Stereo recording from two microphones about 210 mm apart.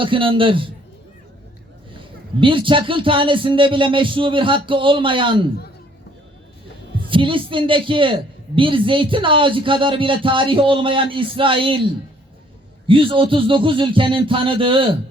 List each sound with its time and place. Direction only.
0.0 s a man's voice: 25° right (ahead or behind)
1.9 s a man's voice: 25° right (ahead or behind)
7.0 s a man's voice: 25° right (ahead or behind)
12.9 s a man's voice: 25° right (ahead or behind)